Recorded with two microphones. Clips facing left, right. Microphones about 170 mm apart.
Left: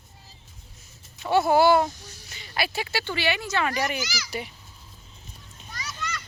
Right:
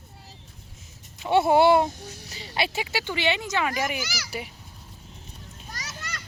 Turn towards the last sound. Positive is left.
turn(degrees=-45)  # may be behind; listen again after turning